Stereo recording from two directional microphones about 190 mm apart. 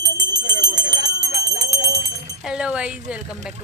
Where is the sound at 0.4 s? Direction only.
65° right (ahead or behind).